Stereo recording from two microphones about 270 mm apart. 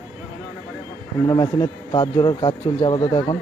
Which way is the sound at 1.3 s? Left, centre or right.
Centre.